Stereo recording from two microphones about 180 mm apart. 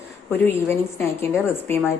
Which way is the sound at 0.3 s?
10° left (ahead or behind).